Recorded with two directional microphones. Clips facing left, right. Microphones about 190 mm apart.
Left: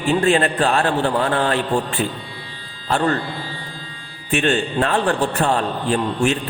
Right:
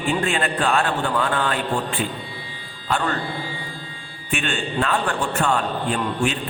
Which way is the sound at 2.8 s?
40° left (ahead or behind).